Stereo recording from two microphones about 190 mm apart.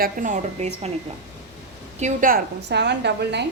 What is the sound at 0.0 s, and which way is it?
Speech, 40° right (ahead or behind).